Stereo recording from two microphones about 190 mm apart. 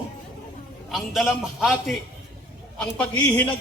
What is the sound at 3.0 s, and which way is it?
Speech, 5° left (ahead or behind).